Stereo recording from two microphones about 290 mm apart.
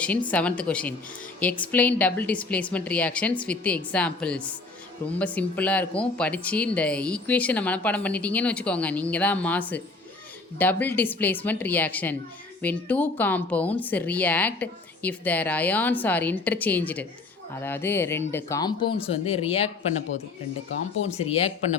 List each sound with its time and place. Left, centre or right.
0.3 s speech: centre; by 19.7 s left
21.2 s speech: left